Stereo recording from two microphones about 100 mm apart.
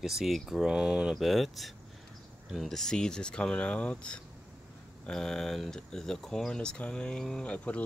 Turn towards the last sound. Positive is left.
turn(degrees=15)  # may be behind; listen again after turning